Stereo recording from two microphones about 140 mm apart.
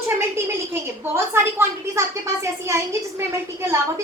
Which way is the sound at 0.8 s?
15° right (ahead or behind).